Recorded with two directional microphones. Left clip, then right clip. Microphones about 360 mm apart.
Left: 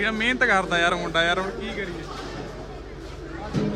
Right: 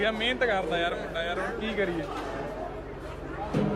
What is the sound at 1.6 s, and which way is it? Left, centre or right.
Speech, centre.